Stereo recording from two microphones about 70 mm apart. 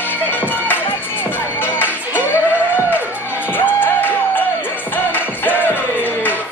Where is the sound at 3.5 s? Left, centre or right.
Left.